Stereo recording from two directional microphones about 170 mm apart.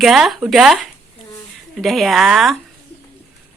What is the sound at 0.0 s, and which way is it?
Speech, centre (ahead or behind).